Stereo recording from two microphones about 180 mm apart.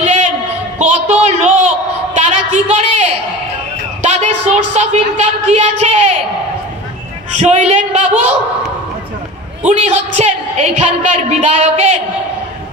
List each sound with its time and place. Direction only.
0.0 s a sound: 40° right (ahead or behind)
4.0 s a woman's voice: 40° right (ahead or behind)
7.3 s a woman's voice: 40° right (ahead or behind)
9.7 s a woman's voice: 40° right (ahead or behind)